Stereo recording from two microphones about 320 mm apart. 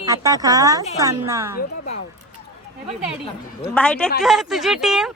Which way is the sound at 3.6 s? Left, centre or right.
Centre.